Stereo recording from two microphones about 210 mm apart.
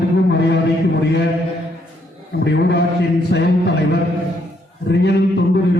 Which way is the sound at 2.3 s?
50° left (ahead or behind).